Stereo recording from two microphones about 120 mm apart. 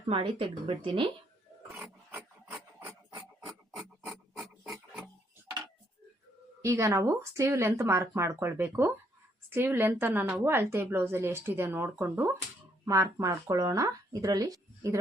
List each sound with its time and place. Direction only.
0.1 s speech: 45° right (ahead or behind)
1.7 s dog: 15° right (ahead or behind)
3.8 s filing: 5° right (ahead or behind)
6.6 s a woman's voice: 25° right (ahead or behind)
12.8 s speech: 25° right (ahead or behind)